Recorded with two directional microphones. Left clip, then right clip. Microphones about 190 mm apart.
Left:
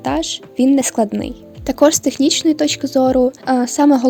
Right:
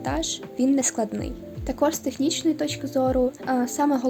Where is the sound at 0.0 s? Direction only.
45° left (ahead or behind).